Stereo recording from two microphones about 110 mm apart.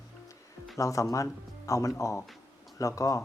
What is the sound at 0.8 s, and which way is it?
Speech, 30° left (ahead or behind).